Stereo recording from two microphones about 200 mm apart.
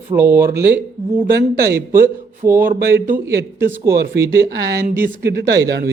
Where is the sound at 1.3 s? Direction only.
50° right (ahead or behind).